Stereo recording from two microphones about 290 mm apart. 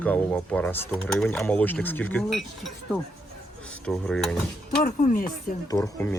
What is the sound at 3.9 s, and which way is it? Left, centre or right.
Speech, centre.